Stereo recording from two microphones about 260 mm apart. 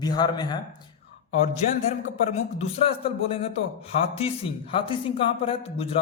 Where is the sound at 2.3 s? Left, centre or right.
Left.